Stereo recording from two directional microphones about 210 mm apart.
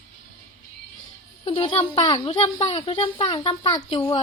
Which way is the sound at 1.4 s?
25° left (ahead or behind).